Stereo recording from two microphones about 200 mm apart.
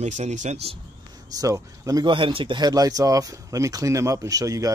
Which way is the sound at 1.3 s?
15° right (ahead or behind).